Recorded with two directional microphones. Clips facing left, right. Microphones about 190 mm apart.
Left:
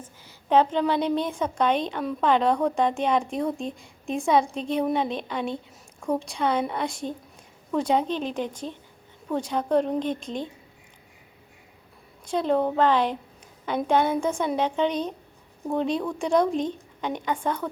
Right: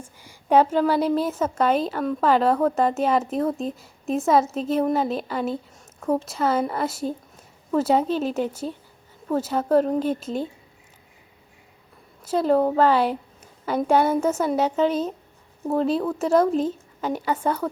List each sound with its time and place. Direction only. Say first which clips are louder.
0.0 s a woman's voice: right 2 dB; 10° right (ahead or behind)
12.2 s a woman's voice: right 4 dB; 5° right (ahead or behind)